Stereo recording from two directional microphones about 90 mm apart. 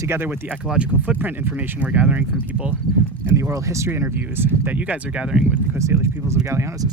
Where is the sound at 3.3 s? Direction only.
35° right (ahead or behind); by 5.2 s 15° right (ahead or behind).